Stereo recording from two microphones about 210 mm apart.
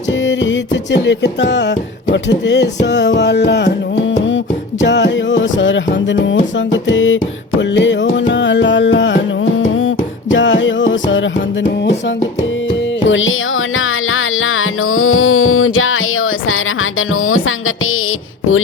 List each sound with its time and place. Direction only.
0.3 s music: 60° left (ahead or behind)
4.8 s music: 55° left (ahead or behind)
13.1 s music: 65° left (ahead or behind)